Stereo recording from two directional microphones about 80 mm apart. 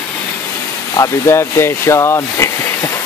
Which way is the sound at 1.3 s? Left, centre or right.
Left.